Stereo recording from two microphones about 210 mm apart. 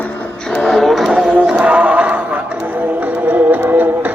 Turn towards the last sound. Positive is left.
turn(degrees=-10)  # may be behind; listen again after turning